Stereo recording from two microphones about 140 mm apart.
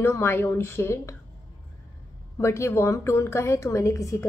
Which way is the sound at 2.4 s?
20° left (ahead or behind).